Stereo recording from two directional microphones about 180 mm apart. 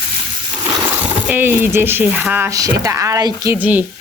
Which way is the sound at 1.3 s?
10° right (ahead or behind).